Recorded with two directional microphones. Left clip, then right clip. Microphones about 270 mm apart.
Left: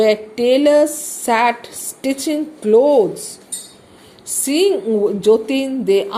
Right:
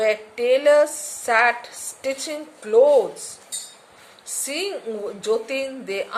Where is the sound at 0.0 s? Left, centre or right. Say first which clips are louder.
Left 6 dB; centre.